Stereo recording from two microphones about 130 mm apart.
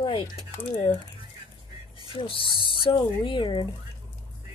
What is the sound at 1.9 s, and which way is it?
Speech, 40° left (ahead or behind).